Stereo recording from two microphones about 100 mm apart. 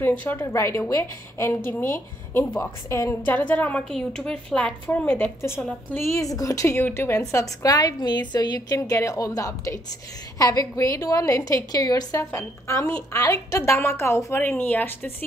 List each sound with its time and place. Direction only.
0.0 s a woman's voice: 20° left (ahead or behind)
4.8 s a woman's voice: 20° left (ahead or behind)
5.6 s a woman's voice: 10° left (ahead or behind)
5.9 s a woman's voice: 30° left (ahead or behind)
7.7 s a woman's voice: 45° left (ahead or behind)
8.7 s a woman's voice: 30° left (ahead or behind)